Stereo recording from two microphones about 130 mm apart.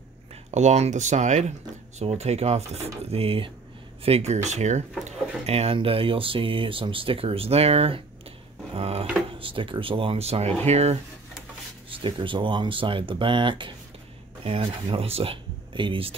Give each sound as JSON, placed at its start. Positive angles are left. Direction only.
{"t": 0.5, "sound": "speech", "side_deg": -65}
{"t": 5.5, "sound": "speech", "side_deg": -50}
{"t": 8.7, "sound": "a sound", "side_deg": -50}
{"t": 9.4, "sound": "speech", "side_deg": -40}
{"t": 11.9, "sound": "speech", "side_deg": -40}